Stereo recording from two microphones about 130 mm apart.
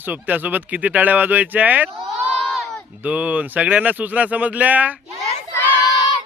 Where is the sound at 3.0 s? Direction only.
10° right (ahead or behind).